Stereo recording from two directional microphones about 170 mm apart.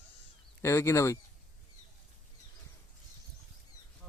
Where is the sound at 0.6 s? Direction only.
15° left (ahead or behind).